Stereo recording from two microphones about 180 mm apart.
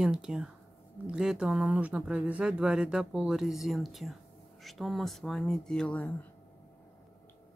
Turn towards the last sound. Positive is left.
turn(degrees=5)  # may be behind; listen again after turning